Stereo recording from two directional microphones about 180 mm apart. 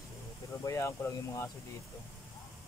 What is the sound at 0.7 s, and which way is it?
Speech, 15° left (ahead or behind).